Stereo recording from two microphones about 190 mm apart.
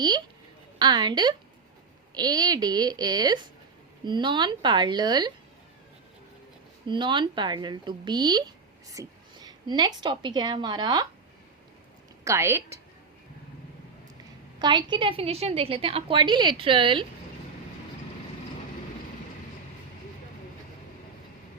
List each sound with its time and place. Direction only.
0.8 s a woman's voice: 25° right (ahead or behind)
6.8 s speech: 25° right (ahead or behind)
12.2 s a woman's voice: 15° right (ahead or behind)
14.6 s a woman's voice: 25° right (ahead or behind)